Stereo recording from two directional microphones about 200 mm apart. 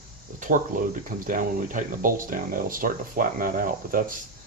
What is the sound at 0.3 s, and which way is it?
Speech, 40° right (ahead or behind).